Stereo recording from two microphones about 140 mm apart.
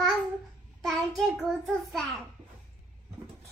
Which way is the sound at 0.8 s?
Centre (ahead or behind).